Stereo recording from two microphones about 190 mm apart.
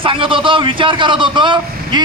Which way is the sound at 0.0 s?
25° right (ahead or behind).